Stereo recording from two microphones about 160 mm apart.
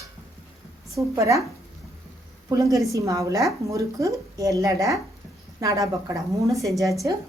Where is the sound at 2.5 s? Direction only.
20° right (ahead or behind).